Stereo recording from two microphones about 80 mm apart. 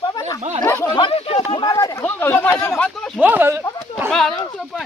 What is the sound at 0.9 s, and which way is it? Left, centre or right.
Speech, left.